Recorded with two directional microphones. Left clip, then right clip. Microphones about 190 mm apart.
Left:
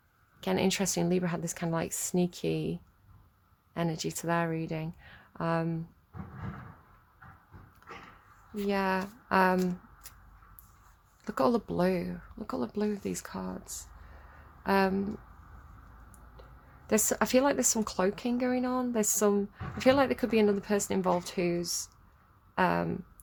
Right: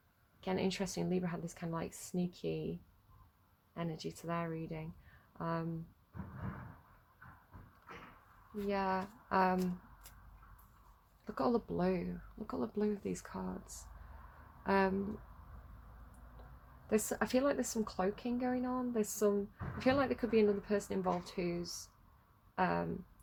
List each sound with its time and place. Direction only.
0.3 s speech: 30° left (ahead or behind)
3.8 s speech: 40° left (ahead or behind)
8.6 s speech: 30° left (ahead or behind)
11.3 s speech: 35° left (ahead or behind); by 14.9 s 20° left (ahead or behind)
16.8 s speech: 35° left (ahead or behind)